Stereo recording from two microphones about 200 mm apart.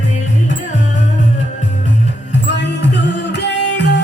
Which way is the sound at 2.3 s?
60° left (ahead or behind).